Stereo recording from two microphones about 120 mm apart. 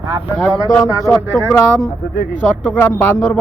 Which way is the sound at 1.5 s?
20° left (ahead or behind).